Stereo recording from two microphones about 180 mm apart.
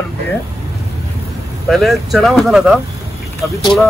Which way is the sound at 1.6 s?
Centre (ahead or behind).